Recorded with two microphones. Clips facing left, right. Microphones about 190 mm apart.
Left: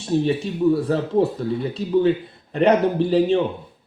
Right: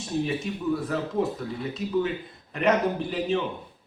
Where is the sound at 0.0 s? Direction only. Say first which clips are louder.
Left 7 dB; 30° left (ahead or behind).